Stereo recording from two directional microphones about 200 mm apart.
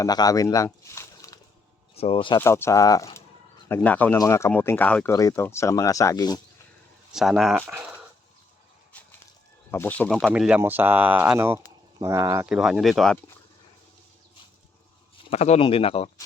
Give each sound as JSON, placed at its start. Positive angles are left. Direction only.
{"t": 0.0, "sound": "speech", "side_deg": 20}
{"t": 2.0, "sound": "speech", "side_deg": 25}
{"t": 2.4, "sound": "speech", "side_deg": 15}
{"t": 7.1, "sound": "speech", "side_deg": 0}
{"t": 9.7, "sound": "speech", "side_deg": 10}
{"t": 12.5, "sound": "speech", "side_deg": -5}
{"t": 15.3, "sound": "speech", "side_deg": 35}